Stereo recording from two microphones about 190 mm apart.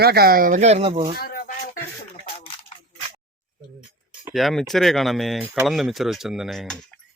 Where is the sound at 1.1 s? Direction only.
50° left (ahead or behind).